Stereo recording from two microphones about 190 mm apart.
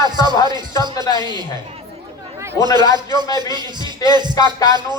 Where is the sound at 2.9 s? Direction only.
20° right (ahead or behind).